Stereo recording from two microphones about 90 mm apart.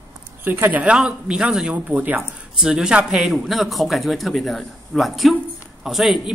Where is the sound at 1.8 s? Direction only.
20° right (ahead or behind).